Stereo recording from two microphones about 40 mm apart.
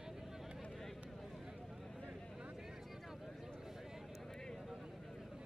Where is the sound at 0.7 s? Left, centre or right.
Centre.